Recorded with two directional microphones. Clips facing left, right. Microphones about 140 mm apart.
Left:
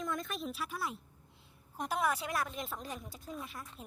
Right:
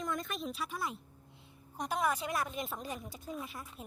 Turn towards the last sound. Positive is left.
turn(degrees=0)  # may be behind; listen again after turning